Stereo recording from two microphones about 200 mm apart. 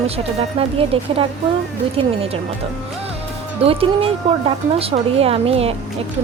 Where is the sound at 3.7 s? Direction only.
30° right (ahead or behind).